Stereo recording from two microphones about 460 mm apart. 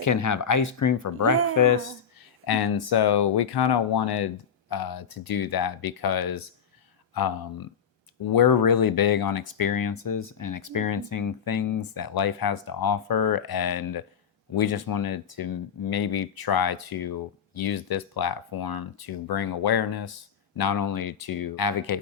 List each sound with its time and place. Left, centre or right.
0.0 s speech: left
2.5 s speech: left